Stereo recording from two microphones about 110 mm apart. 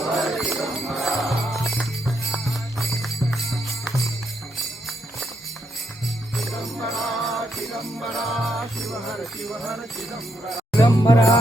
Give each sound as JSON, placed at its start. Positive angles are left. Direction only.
{"t": 0.0, "sound": "music", "side_deg": 0}
{"t": 6.3, "sound": "music", "side_deg": 0}
{"t": 10.8, "sound": "music", "side_deg": 30}